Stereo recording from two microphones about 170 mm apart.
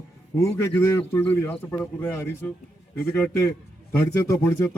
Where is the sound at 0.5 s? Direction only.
15° left (ahead or behind).